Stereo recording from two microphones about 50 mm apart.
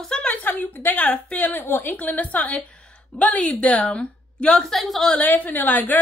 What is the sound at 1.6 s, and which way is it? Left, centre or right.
Speech, left.